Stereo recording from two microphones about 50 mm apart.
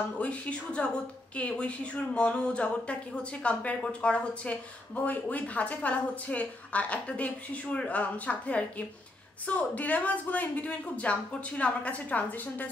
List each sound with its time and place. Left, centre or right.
0.2 s speech: left